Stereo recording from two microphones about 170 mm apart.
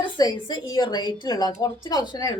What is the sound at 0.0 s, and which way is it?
A woman's voice, 25° left (ahead or behind).